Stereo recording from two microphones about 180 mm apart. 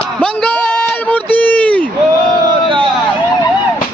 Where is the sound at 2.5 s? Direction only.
25° right (ahead or behind).